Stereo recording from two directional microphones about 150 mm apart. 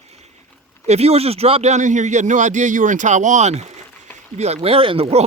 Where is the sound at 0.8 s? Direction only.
45° right (ahead or behind).